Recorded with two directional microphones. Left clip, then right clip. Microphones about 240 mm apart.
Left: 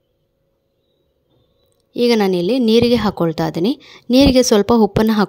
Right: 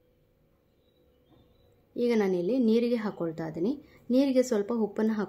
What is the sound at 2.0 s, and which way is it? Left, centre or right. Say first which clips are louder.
A woman's voice: left 12 dB; left.